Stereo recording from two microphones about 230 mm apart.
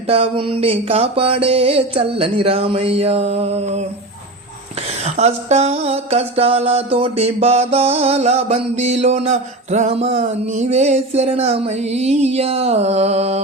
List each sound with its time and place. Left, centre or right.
0.1 s music: right
5.0 s music: right